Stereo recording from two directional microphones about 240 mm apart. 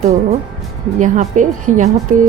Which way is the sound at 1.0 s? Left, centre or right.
Right.